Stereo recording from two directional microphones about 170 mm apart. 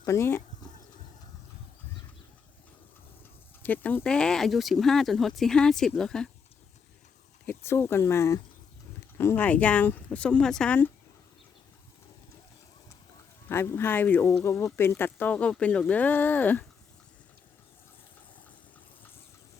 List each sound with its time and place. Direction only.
0.0 s speech: 15° left (ahead or behind)
3.6 s speech: 10° left (ahead or behind)
7.4 s speech: 15° left (ahead or behind)
13.5 s speech: 15° left (ahead or behind)